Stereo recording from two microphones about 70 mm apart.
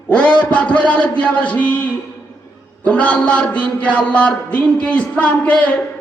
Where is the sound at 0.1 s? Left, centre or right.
Centre.